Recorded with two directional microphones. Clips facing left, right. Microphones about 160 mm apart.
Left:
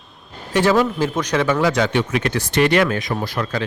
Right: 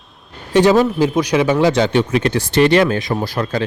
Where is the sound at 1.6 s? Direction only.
25° right (ahead or behind).